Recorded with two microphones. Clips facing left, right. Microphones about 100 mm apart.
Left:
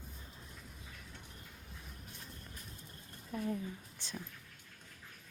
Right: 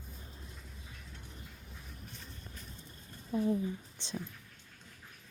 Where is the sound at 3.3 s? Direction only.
25° right (ahead or behind).